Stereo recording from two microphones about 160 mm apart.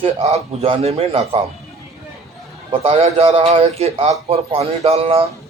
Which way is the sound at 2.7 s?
35° right (ahead or behind).